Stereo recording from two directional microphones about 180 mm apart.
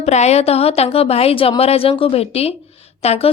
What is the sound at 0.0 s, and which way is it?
Speech, 40° left (ahead or behind).